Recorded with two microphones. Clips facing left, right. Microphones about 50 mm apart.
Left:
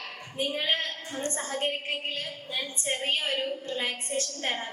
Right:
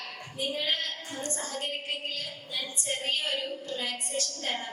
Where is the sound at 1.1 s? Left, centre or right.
Left.